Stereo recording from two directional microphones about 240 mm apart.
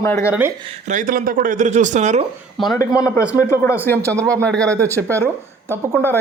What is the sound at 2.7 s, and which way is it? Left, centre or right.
A man's voice, centre.